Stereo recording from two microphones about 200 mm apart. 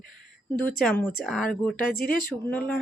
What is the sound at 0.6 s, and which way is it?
Speech, 5° left (ahead or behind).